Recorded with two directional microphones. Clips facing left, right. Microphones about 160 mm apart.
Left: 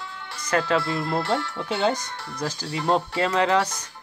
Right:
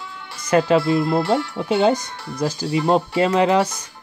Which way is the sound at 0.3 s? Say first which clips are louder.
Right 7 dB; 10° right (ahead or behind).